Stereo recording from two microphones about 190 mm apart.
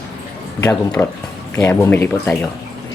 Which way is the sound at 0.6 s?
10° left (ahead or behind).